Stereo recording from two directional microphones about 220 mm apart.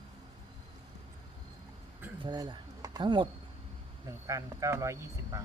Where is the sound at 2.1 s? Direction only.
20° right (ahead or behind).